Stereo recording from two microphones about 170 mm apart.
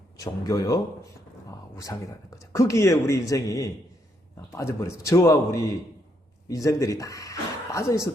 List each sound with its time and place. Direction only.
0.2 s speech: 20° left (ahead or behind)